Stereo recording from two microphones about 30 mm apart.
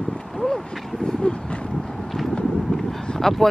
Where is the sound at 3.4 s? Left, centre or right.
Centre.